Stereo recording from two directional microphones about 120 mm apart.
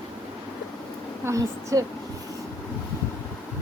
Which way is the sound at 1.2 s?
25° right (ahead or behind).